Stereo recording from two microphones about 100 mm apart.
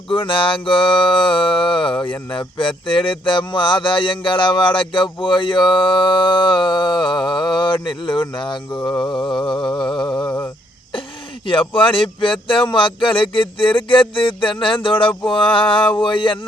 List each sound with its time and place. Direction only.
0.1 s speech: 60° left (ahead or behind)
9.2 s mantra: 50° left (ahead or behind)
10.1 s mantra: 10° left (ahead or behind)
11.4 s speech: 60° left (ahead or behind)